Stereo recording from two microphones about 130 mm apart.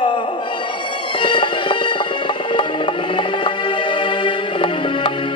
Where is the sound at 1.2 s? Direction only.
40° left (ahead or behind).